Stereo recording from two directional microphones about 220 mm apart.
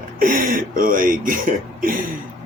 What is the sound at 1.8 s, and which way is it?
Throat clearing, 40° right (ahead or behind).